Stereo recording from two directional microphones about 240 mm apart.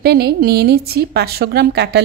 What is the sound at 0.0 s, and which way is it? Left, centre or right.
Speech, right.